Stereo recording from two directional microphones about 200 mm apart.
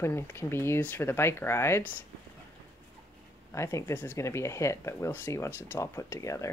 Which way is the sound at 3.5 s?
15° left (ahead or behind).